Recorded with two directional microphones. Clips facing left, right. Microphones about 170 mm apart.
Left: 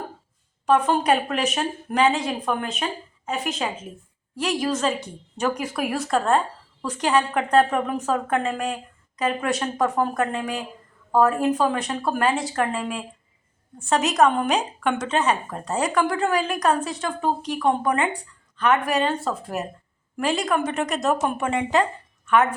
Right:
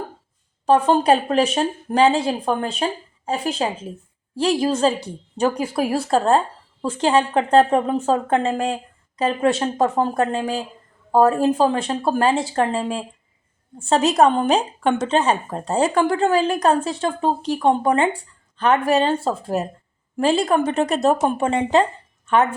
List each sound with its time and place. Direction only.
0.6 s a woman's voice: 30° right (ahead or behind)